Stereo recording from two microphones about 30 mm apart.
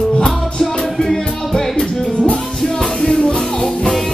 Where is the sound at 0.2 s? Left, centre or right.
Left.